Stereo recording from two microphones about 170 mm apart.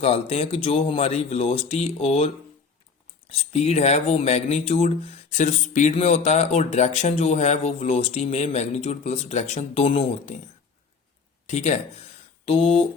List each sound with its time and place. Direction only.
0.0 s speech: 35° left (ahead or behind)
3.3 s speech: 35° left (ahead or behind)
11.4 s speech: 40° left (ahead or behind)